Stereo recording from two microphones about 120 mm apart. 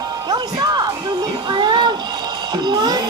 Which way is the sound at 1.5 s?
40° right (ahead or behind).